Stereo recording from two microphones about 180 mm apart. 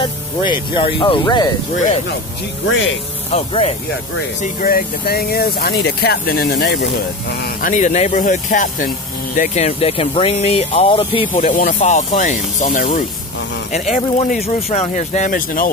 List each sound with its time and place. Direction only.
0.0 s speech: 25° left (ahead or behind)
3.3 s speech: 35° left (ahead or behind)
4.4 s speech: 50° left (ahead or behind)
7.4 s speech: 45° left (ahead or behind); by 11.2 s 30° left (ahead or behind)
11.3 s speech: 45° left (ahead or behind)